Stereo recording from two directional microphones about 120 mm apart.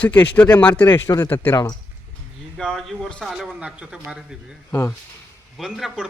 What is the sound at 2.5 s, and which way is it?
Speech, centre (ahead or behind).